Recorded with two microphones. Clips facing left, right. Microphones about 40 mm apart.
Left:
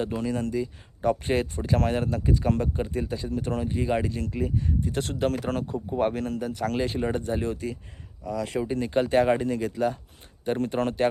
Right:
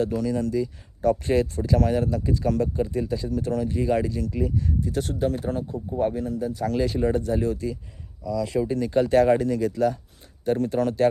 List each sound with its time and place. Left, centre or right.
0.0 s speech: left
5.4 s speech: left
6.7 s speech: left
8.6 s speech: left